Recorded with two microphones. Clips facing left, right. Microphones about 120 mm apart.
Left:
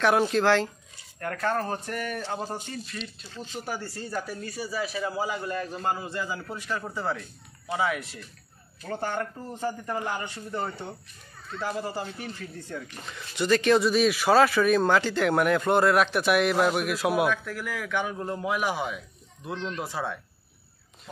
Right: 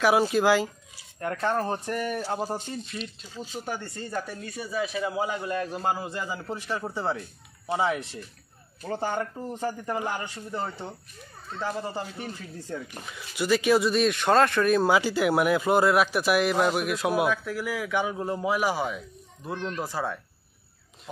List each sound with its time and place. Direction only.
0.0 s speech: 5° right (ahead or behind)
1.2 s speech: 25° right (ahead or behind); by 3.6 s 10° right (ahead or behind)
3.6 s speech: 5° left (ahead or behind)
6.4 s speech: 25° right (ahead or behind)
9.0 s speech: 10° right (ahead or behind)
12.4 s speech: 10° right (ahead or behind)